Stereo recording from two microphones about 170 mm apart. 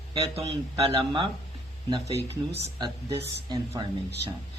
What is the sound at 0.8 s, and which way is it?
Speech, 30° right (ahead or behind).